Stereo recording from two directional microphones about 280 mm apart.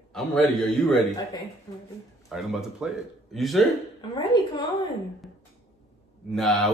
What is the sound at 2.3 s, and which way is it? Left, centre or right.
A man's voice, centre.